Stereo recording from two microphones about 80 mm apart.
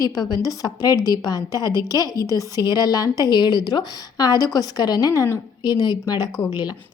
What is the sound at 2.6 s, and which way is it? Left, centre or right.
A woman's voice, left.